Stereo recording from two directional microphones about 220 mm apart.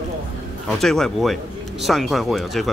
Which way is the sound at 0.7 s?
Centre (ahead or behind).